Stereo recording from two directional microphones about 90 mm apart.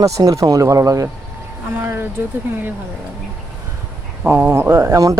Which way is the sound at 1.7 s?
25° right (ahead or behind).